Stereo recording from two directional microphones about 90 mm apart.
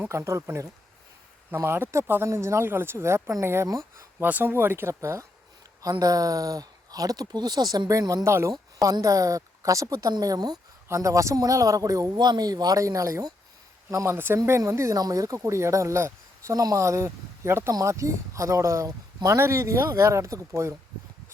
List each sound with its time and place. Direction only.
0.0 s speech: 30° right (ahead or behind)
4.2 s speech: 20° right (ahead or behind); by 10.6 s 45° right (ahead or behind)
10.8 s speech: 35° right (ahead or behind)
12.1 s speech: 50° right (ahead or behind); by 20.7 s 35° right (ahead or behind)